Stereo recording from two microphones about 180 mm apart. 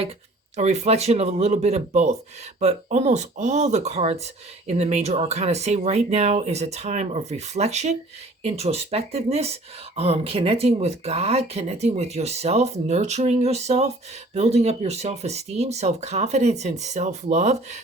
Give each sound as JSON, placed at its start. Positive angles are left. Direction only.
{"t": 0.5, "sound": "speech", "side_deg": -40}